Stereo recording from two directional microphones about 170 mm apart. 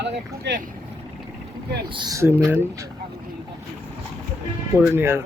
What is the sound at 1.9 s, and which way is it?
Speech, 25° right (ahead or behind).